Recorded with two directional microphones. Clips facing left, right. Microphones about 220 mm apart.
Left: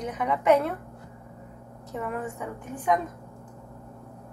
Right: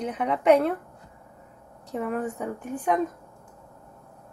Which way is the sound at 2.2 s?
45° right (ahead or behind).